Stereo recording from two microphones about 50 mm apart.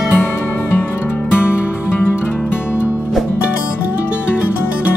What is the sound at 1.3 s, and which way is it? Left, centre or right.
Music, left.